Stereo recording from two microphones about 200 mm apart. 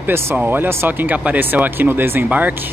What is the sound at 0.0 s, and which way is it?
Speech, 10° right (ahead or behind).